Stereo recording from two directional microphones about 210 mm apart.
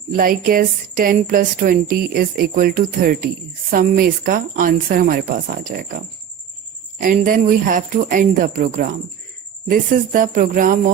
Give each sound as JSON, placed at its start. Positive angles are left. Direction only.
{"t": 0.1, "sound": "a woman's voice", "side_deg": -45}
{"t": 7.0, "sound": "speech", "side_deg": -40}